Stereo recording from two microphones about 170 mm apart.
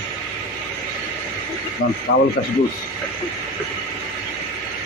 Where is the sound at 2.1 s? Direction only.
80° left.